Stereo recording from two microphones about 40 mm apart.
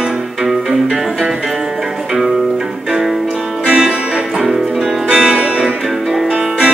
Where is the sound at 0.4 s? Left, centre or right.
Centre.